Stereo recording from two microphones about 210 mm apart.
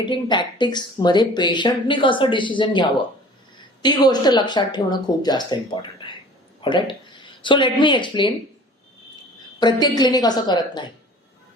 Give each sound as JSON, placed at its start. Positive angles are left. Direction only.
{"t": 0.0, "sound": "speech", "side_deg": 20}
{"t": 9.6, "sound": "speech", "side_deg": 20}